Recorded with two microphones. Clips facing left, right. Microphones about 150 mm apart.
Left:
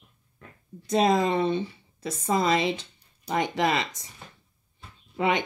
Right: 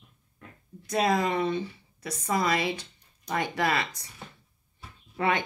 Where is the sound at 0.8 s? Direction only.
25° left (ahead or behind).